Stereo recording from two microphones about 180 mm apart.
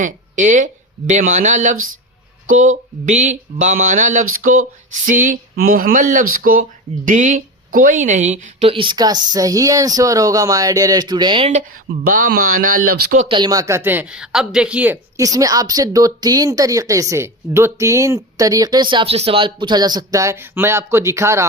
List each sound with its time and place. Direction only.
0.0 s speech: 45° right (ahead or behind)
3.1 s speech: 40° right (ahead or behind)
11.6 s speech: 50° right (ahead or behind)
13.2 s speech: 25° right (ahead or behind)